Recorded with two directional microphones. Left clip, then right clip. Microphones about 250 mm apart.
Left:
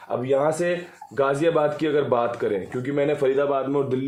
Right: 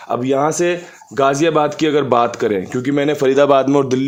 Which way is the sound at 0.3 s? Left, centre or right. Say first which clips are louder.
Right 5 dB; right.